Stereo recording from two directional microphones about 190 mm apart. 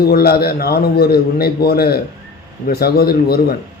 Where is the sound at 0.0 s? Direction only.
55° left (ahead or behind).